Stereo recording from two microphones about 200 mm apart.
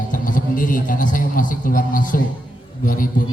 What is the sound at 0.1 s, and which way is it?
A man's voice, 40° left (ahead or behind).